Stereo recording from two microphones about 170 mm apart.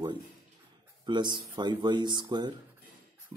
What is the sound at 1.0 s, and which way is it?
Speech, 25° right (ahead or behind).